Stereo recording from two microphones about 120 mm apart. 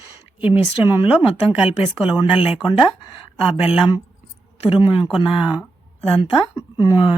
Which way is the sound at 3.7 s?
45° left (ahead or behind).